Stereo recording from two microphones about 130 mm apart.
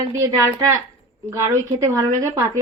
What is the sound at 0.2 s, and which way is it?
Speech, 20° right (ahead or behind).